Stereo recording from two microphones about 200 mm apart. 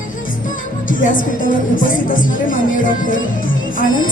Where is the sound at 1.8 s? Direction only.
40° left (ahead or behind).